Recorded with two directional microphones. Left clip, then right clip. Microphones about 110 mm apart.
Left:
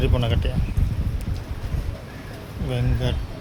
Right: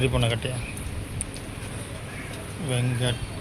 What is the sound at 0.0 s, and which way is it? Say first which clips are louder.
Speech: even; 10° left (ahead or behind).